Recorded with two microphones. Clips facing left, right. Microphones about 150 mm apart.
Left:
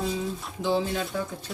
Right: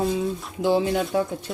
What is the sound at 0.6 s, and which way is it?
Speech, 90° right.